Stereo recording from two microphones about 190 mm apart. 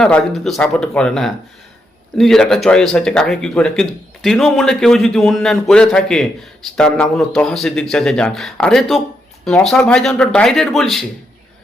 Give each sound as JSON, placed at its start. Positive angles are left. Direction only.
{"t": 0.0, "sound": "speech", "side_deg": 5}